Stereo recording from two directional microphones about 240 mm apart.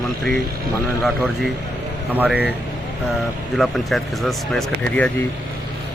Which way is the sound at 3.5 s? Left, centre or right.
Centre.